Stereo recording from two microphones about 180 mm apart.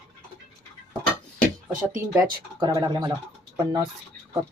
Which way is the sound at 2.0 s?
20° right (ahead or behind).